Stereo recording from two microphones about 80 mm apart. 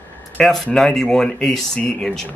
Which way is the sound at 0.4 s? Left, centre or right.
Centre.